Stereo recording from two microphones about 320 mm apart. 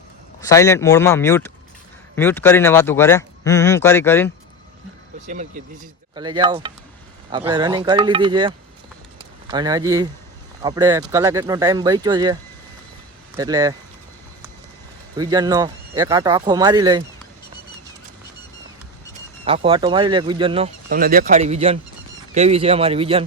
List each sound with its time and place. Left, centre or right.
0.4 s speech: centre
5.2 s a man's voice: right
15.1 s speech: centre
19.5 s a man's voice: centre